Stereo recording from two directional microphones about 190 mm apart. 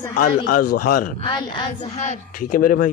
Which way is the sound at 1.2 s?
25° left (ahead or behind).